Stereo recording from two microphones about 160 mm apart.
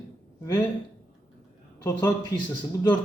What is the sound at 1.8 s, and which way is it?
Speech, 20° left (ahead or behind).